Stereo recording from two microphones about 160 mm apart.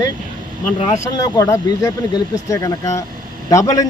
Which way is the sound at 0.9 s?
20° left (ahead or behind).